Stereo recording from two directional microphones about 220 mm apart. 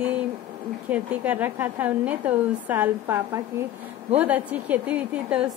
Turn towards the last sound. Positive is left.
turn(degrees=-5)  # may be behind; listen again after turning